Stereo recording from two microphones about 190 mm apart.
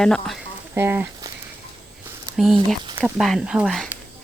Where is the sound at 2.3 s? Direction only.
Centre (ahead or behind).